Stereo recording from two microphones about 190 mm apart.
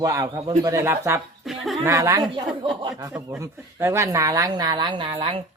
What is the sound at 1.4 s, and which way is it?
Speech, centre (ahead or behind).